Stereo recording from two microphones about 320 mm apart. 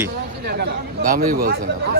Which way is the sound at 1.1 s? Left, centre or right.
Right.